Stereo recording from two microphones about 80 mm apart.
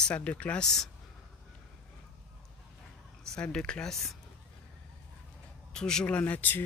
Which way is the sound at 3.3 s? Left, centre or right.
Centre.